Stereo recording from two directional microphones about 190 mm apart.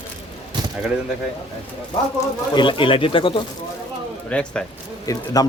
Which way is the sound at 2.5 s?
25° left (ahead or behind).